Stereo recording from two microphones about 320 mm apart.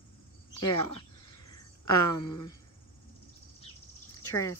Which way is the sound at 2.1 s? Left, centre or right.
Centre.